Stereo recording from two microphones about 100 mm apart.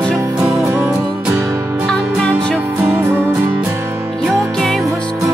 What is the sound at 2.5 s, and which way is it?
Music, 20° right (ahead or behind).